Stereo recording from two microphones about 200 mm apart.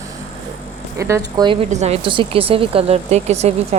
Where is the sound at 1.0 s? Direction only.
15° right (ahead or behind); by 3.5 s 35° right (ahead or behind).